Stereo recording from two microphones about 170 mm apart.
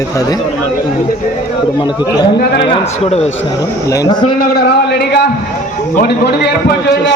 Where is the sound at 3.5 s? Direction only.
20° left (ahead or behind).